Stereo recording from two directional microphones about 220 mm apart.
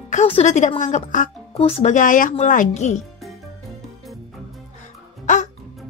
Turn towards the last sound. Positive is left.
turn(degrees=35)  # may be behind; listen again after turning